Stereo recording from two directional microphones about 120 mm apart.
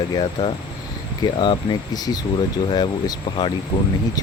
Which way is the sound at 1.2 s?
40° left (ahead or behind).